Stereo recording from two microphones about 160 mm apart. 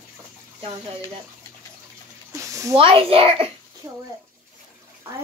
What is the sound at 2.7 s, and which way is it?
Speech, 35° right (ahead or behind).